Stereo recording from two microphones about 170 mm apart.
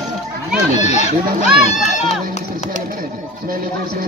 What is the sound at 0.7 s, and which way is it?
Speech, 40° left (ahead or behind).